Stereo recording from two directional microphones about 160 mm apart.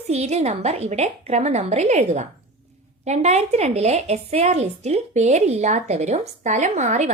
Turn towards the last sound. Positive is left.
turn(degrees=-50)  # may be behind; listen again after turning